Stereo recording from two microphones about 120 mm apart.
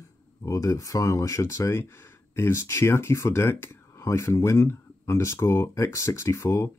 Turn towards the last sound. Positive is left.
turn(degrees=25)  # may be behind; listen again after turning